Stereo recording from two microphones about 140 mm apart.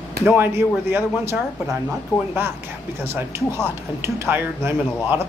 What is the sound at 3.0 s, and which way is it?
Speech, 15° right (ahead or behind).